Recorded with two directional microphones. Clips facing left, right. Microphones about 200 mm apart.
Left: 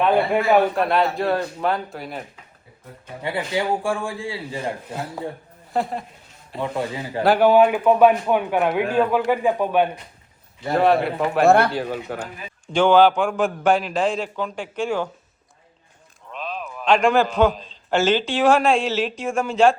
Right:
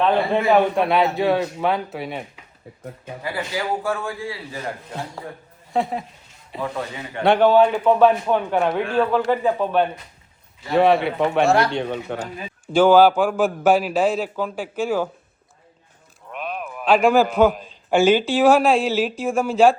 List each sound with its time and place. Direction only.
0.0 s a man's voice: 10° left (ahead or behind)
3.2 s a man's voice: 25° left (ahead or behind)
4.9 s a man's voice: 5° left (ahead or behind)
6.6 s a man's voice: 30° left (ahead or behind)
7.2 s a man's voice: 5° left (ahead or behind)
10.8 s a man's voice: centre (ahead or behind)
11.4 s speech: 55° left (ahead or behind)
11.7 s a man's voice: 5° left (ahead or behind)
12.7 s a man's voice: 5° right (ahead or behind)
16.3 s a man's voice: 10° right (ahead or behind)